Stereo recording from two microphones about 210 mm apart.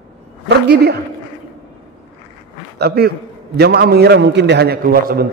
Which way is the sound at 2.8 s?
50° right (ahead or behind).